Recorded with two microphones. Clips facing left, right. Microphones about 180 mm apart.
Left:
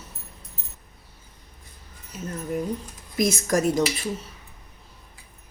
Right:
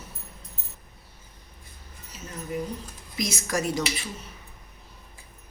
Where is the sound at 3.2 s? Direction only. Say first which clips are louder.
Left 7 dB; 50° left (ahead or behind).